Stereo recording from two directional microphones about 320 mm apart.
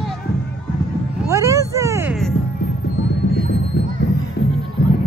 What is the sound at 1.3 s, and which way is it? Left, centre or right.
Speech, centre.